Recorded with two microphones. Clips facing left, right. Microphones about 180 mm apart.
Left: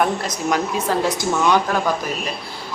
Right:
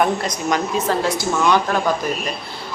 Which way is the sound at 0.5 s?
15° left (ahead or behind).